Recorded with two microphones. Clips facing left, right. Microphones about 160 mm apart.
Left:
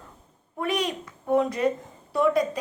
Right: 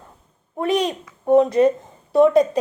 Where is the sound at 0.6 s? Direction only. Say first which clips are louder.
Right 6 dB; 25° right (ahead or behind).